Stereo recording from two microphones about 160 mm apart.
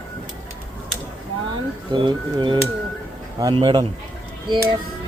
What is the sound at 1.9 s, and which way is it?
A man's voice, 30° right (ahead or behind).